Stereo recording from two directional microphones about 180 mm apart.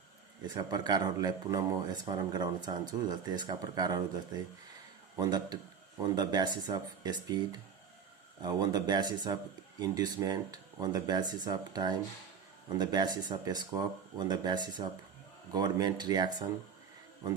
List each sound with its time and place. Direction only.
0.4 s speech: 20° right (ahead or behind)
5.1 s speech: 20° right (ahead or behind)
8.4 s speech: 25° right (ahead or behind)